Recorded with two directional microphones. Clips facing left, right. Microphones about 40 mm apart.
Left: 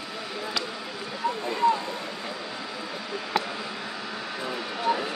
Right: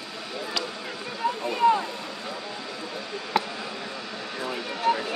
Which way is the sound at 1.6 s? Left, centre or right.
Right.